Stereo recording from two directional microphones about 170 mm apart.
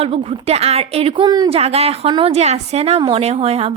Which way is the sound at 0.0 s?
35° right (ahead or behind).